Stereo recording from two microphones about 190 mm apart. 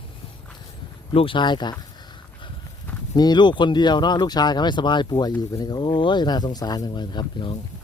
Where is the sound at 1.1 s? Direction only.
30° left (ahead or behind).